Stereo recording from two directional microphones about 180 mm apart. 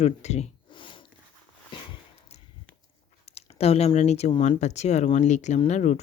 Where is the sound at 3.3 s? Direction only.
35° left (ahead or behind).